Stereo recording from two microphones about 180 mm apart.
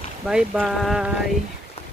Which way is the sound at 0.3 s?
5° right (ahead or behind).